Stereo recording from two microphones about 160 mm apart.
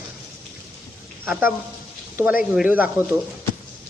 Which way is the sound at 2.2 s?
15° right (ahead or behind).